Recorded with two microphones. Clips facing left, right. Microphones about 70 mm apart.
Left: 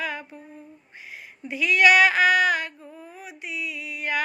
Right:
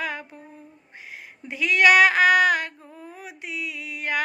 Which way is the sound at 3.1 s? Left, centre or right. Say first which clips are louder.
Right 1 dB; right.